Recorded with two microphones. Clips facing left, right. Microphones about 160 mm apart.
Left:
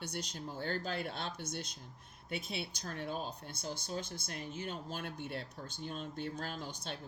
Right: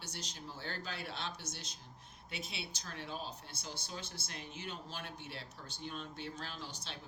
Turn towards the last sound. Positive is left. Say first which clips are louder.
# left 5 dB
turn(degrees=50)  # may be behind; listen again after turning